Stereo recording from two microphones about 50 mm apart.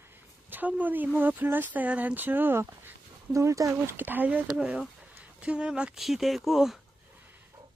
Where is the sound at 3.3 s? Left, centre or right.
Right.